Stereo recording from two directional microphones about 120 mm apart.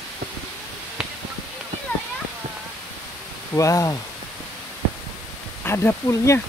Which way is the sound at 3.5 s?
25° left (ahead or behind).